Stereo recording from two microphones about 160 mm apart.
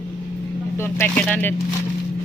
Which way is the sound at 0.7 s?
15° left (ahead or behind).